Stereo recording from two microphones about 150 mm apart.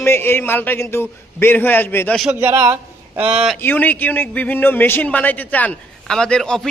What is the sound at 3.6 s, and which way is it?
A man's voice, 15° left (ahead or behind).